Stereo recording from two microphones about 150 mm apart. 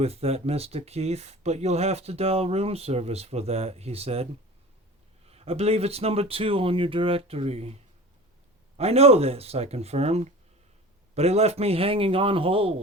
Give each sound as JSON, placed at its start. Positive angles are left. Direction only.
{"t": 0.0, "sound": "speech", "side_deg": -40}
{"t": 8.8, "sound": "a man's voice", "side_deg": -45}